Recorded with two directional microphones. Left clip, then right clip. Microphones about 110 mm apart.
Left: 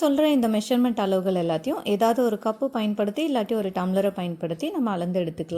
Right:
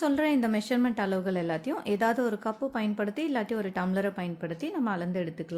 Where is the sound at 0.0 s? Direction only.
25° left (ahead or behind).